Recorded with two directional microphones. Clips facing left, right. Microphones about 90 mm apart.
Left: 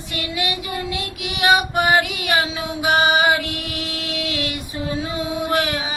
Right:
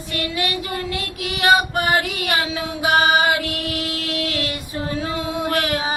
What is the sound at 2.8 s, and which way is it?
Mantra, 35° right (ahead or behind).